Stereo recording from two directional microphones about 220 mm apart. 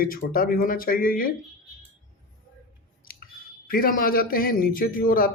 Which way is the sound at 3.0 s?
40° left (ahead or behind).